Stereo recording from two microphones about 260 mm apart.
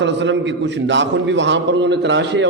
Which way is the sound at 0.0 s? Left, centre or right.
Right.